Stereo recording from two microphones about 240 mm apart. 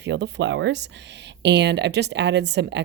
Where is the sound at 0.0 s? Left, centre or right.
Right.